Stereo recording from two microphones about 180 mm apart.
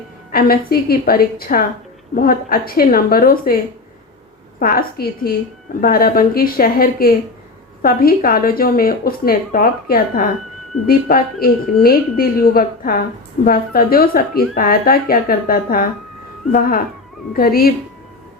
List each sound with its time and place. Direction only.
0.3 s a woman's voice: 55° left (ahead or behind)
4.6 s a woman's voice: 55° left (ahead or behind)